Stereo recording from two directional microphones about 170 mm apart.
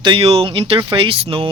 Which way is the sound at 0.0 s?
30° right (ahead or behind).